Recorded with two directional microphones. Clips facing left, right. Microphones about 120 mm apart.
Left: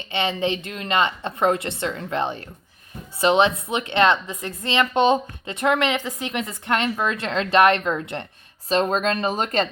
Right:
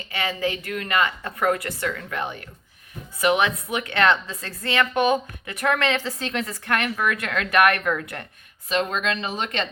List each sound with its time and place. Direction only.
0.1 s a woman's voice: 25° left (ahead or behind)
8.7 s speech: 40° left (ahead or behind)